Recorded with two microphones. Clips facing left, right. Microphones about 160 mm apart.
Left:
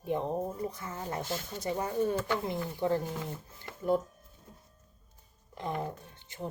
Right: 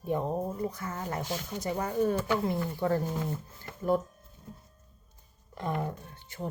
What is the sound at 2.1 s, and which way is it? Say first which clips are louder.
Speech: right 2 dB; 15° right (ahead or behind).